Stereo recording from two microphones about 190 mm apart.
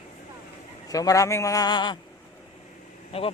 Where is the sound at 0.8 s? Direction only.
20° left (ahead or behind).